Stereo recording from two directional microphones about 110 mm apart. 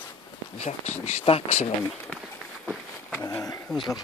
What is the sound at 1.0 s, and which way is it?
Speech, 75° left (ahead or behind).